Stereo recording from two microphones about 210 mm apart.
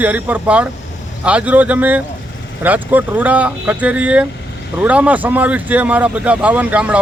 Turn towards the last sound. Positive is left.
turn(degrees=-5)  # may be behind; listen again after turning